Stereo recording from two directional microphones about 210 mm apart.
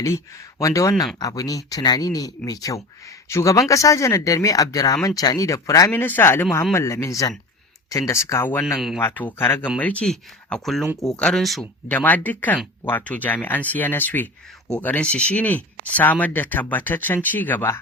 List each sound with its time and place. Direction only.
0.0 s speech: 15° left (ahead or behind)